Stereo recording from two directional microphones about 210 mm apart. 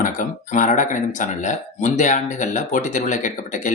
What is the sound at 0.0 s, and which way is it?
Speech, 40° left (ahead or behind).